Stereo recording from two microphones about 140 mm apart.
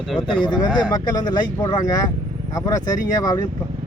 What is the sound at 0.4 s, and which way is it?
Speech, 30° left (ahead or behind).